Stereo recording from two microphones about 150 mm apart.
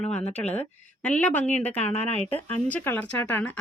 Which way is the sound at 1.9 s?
45° left (ahead or behind).